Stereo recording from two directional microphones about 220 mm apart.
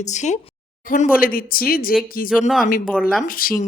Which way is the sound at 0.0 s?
30° left (ahead or behind).